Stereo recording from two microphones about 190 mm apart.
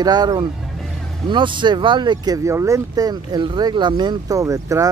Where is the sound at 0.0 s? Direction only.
20° right (ahead or behind).